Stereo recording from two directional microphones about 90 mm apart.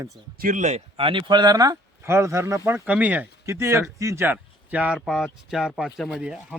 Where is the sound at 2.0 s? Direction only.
30° right (ahead or behind).